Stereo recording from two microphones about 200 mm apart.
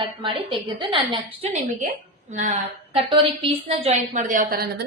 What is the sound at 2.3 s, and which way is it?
A woman's voice, 40° right (ahead or behind).